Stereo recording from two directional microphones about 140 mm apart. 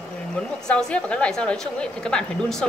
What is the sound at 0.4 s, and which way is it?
A woman's voice, 5° left (ahead or behind).